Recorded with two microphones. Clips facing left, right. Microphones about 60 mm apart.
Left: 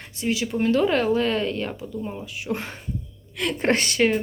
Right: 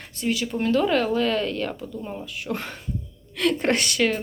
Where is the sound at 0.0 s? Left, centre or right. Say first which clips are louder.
Even; left.